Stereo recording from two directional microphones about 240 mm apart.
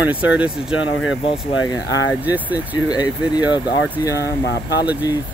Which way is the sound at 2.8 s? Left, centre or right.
Centre.